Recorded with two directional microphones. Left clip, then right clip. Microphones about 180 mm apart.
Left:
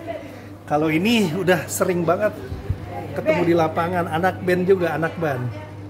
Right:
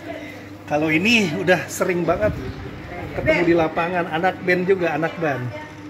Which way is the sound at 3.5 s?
Centre (ahead or behind).